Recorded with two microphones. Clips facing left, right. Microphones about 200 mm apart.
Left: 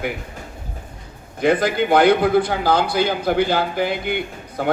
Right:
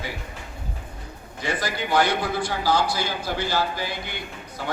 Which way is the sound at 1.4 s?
55° left (ahead or behind).